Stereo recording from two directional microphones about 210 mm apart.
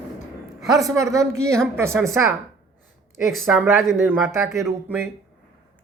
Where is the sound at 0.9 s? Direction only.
15° right (ahead or behind).